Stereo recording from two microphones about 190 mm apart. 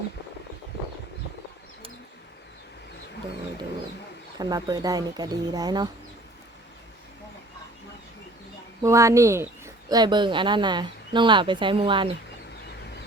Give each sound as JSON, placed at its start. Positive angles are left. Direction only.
{"t": 4.4, "sound": "speech", "side_deg": -20}
{"t": 8.8, "sound": "speech", "side_deg": -15}